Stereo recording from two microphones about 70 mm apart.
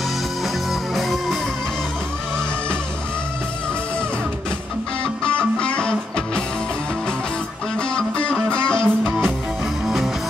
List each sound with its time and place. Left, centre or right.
0.9 s music: centre
5.6 s music: centre
7.9 s music: centre
9.8 s music: centre